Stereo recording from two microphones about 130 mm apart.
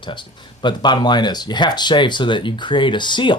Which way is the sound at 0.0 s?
35° left (ahead or behind).